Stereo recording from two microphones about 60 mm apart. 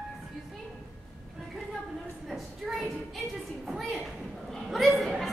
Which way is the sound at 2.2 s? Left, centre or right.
Centre.